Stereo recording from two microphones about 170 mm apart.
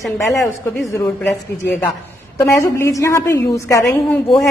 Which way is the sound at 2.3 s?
15° left (ahead or behind).